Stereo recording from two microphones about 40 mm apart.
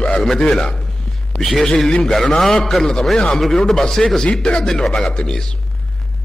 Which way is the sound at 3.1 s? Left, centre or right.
Centre.